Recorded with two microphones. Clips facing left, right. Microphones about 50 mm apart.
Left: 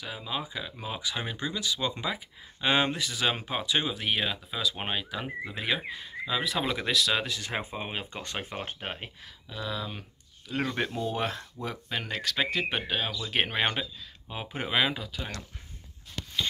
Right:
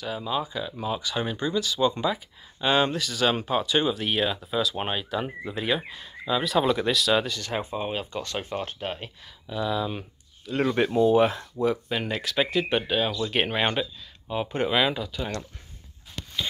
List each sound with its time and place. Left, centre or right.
0.0 s speech: centre
7.3 s speech: centre
9.5 s speech: centre